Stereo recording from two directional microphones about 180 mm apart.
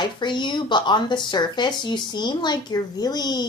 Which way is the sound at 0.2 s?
25° left (ahead or behind).